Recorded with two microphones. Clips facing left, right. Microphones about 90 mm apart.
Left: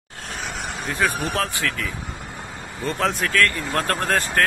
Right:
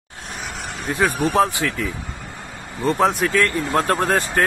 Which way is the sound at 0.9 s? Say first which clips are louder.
Right 6 dB; 20° right (ahead or behind).